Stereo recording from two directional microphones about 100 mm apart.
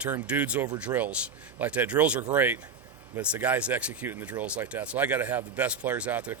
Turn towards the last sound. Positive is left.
turn(degrees=-15)  # may be behind; listen again after turning